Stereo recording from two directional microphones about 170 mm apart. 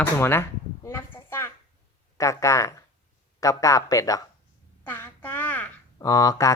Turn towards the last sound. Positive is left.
turn(degrees=20)  # may be behind; listen again after turning